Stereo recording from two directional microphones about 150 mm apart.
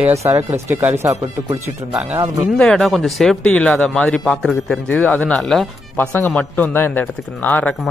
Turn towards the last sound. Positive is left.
turn(degrees=10)  # may be behind; listen again after turning